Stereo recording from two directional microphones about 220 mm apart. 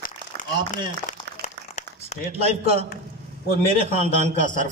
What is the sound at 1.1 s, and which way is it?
Crumpling, 35° left (ahead or behind).